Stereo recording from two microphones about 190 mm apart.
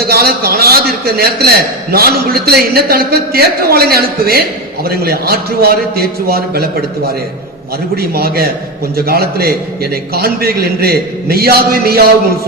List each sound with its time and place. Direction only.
0.0 s a man's voice: 55° right (ahead or behind)
8.1 s a man's voice: 55° right (ahead or behind)